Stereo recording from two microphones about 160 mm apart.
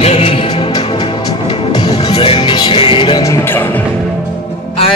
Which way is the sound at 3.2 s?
15° left (ahead or behind).